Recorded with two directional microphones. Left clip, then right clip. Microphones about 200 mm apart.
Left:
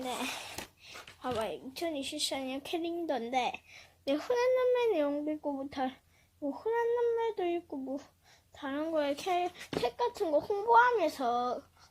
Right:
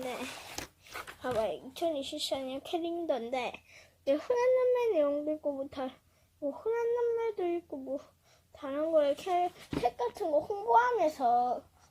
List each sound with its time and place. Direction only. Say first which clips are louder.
1.2 s a woman's voice: right 2 dB; 15° left (ahead or behind); by 11.6 s 35° left (ahead or behind)